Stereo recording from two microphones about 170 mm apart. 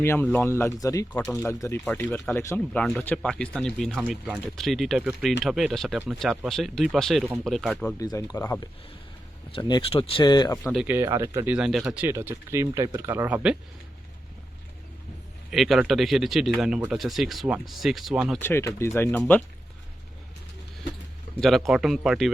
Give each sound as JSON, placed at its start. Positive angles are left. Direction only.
{"t": 0.0, "sound": "speech", "side_deg": 15}
{"t": 1.2, "sound": "speech", "side_deg": 5}
{"t": 7.9, "sound": "speech", "side_deg": 20}
{"t": 9.6, "sound": "speech", "side_deg": 25}
{"t": 10.8, "sound": "speech", "side_deg": -15}
{"t": 11.5, "sound": "speech", "side_deg": -5}
{"t": 15.4, "sound": "speech", "side_deg": 0}
{"t": 18.3, "sound": "speech", "side_deg": 15}
{"t": 21.4, "sound": "speech", "side_deg": 0}